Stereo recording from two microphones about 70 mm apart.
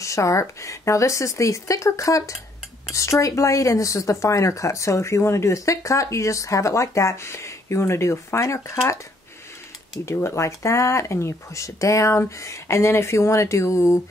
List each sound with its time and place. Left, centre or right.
0.0 s speech: left
10.0 s speech: left